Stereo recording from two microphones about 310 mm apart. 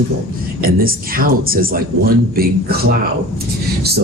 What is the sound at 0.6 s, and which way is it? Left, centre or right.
Speech, right.